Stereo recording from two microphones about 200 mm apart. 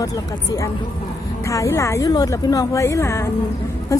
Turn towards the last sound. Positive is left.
turn(degrees=15)  # may be behind; listen again after turning